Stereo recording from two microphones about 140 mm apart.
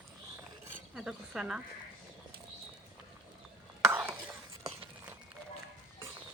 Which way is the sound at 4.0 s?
10° right (ahead or behind).